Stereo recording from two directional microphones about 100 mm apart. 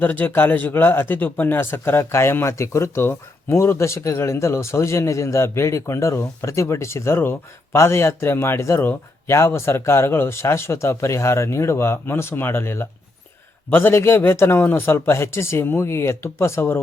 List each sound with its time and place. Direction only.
0.0 s speech: 20° left (ahead or behind)